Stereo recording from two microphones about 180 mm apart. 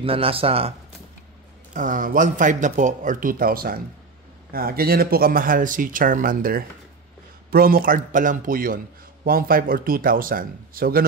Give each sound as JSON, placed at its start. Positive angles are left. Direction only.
{"t": 0.0, "sound": "speech", "side_deg": -30}
{"t": 1.7, "sound": "a man's voice", "side_deg": -45}